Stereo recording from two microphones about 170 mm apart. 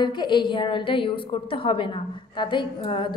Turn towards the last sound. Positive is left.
turn(degrees=30)  # may be behind; listen again after turning